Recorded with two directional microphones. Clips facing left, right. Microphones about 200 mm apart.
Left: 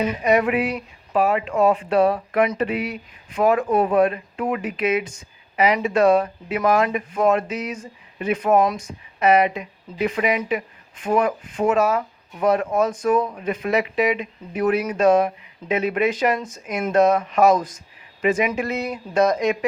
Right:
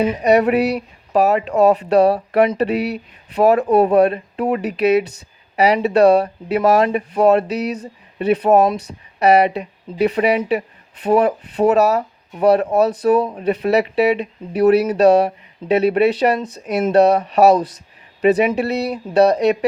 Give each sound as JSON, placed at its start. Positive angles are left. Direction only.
{"t": 0.0, "sound": "speech", "side_deg": -35}